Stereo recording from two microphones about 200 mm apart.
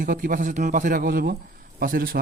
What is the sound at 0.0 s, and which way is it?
A man's voice, 40° right (ahead or behind).